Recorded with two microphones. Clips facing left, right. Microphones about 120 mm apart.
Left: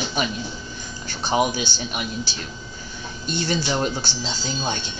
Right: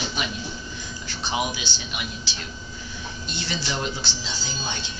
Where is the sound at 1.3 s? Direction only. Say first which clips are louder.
Left 7 dB; 45° left (ahead or behind).